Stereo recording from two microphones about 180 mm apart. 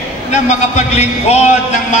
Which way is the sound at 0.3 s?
40° left (ahead or behind).